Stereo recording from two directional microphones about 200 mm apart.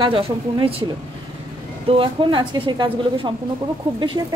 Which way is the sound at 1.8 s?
25° right (ahead or behind).